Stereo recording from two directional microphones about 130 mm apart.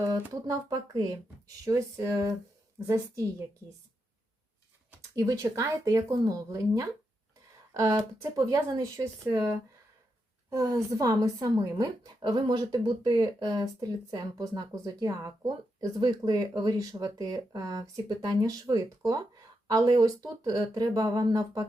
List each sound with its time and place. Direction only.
0.4 s speech: 30° right (ahead or behind)
5.1 s speech: 25° right (ahead or behind)